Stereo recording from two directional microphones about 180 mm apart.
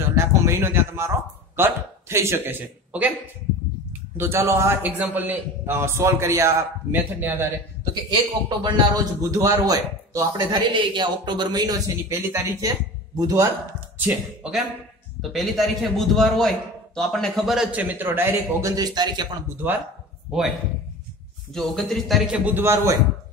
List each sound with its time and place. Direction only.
0.1 s a sound: 15° right (ahead or behind)
1.6 s a man's voice: 15° right (ahead or behind)
4.2 s a man's voice: 15° right (ahead or behind)
13.9 s a man's voice: 5° right (ahead or behind); by 19.2 s 25° right (ahead or behind)
20.2 s a man's voice: 5° right (ahead or behind)
21.5 s a man's voice: centre (ahead or behind)